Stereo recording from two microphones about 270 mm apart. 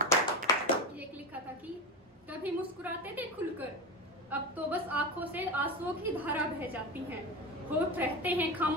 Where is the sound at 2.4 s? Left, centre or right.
Centre.